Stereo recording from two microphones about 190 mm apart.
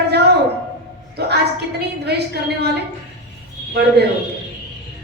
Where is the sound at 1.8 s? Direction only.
60° right (ahead or behind).